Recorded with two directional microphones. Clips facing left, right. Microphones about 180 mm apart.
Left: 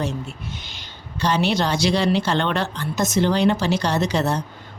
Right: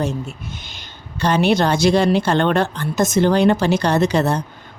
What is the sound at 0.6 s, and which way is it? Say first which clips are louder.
A woman's voice: right 1 dB; 50° right (ahead or behind).